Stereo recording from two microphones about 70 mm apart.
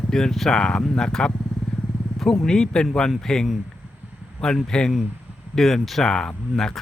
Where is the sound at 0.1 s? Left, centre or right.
Centre.